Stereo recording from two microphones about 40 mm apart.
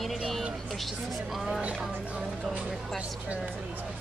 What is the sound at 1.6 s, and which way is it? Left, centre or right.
Speech, right.